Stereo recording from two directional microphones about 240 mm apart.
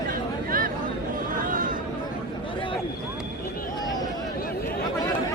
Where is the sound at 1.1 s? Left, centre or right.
Right.